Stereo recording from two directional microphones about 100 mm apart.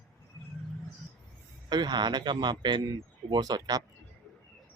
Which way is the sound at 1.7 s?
45° right (ahead or behind).